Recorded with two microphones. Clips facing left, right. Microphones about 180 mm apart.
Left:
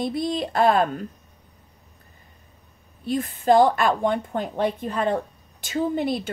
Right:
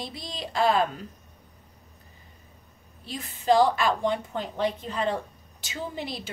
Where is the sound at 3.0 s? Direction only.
55° left (ahead or behind).